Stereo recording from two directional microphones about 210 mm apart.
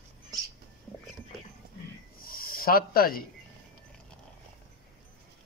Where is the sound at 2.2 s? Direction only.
45° left (ahead or behind).